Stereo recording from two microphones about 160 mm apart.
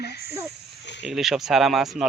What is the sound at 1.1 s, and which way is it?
Speech, centre (ahead or behind).